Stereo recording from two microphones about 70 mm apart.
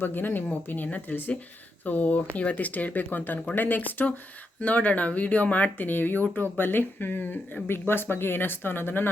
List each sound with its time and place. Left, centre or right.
0.0 s speech: left